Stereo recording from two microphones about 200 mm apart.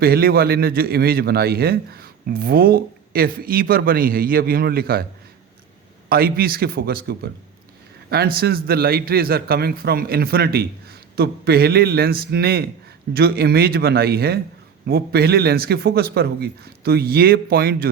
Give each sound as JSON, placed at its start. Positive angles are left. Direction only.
{"t": 0.0, "sound": "a man's voice", "side_deg": -50}
{"t": 6.1, "sound": "a man's voice", "side_deg": -50}
{"t": 8.4, "sound": "a man's voice", "side_deg": -50}